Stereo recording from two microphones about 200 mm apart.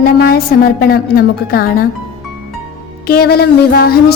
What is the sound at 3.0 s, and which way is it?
Speech, 50° left (ahead or behind).